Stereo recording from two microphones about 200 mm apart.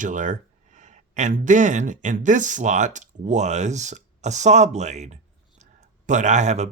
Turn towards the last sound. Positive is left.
turn(degrees=-35)  # may be behind; listen again after turning